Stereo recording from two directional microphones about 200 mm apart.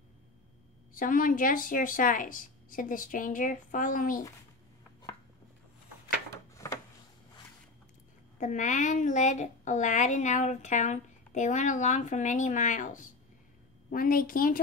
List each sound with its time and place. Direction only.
0.9 s a woman's voice: 45° left (ahead or behind)
6.3 s a sound: 15° left (ahead or behind)
8.4 s a woman's voice: 40° left (ahead or behind)